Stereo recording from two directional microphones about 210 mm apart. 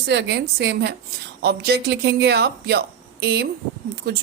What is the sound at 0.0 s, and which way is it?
Speech, 55° right (ahead or behind).